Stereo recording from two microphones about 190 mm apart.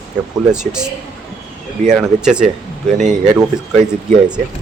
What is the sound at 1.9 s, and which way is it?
Speech, 5° right (ahead or behind).